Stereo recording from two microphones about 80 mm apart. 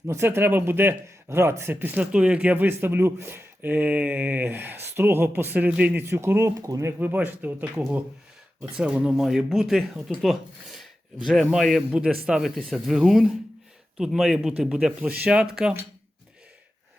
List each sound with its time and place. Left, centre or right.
0.1 s speech: right
6.1 s speech: right
7.0 s speech: right; by 11.8 s centre
11.9 s speech: centre